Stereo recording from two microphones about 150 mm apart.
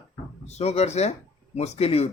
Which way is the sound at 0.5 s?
45° left (ahead or behind).